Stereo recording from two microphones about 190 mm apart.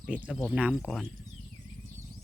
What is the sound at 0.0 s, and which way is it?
Speech, 5° right (ahead or behind).